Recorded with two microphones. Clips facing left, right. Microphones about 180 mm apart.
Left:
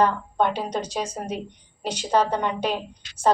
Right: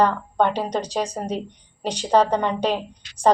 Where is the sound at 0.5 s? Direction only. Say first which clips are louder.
Right 3 dB; 10° right (ahead or behind).